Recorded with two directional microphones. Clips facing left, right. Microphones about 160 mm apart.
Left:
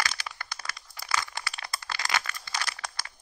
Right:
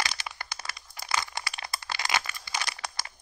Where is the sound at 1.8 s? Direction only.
25° right (ahead or behind).